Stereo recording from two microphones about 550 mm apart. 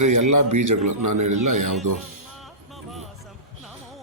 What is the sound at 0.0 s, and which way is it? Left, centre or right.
Speech, right.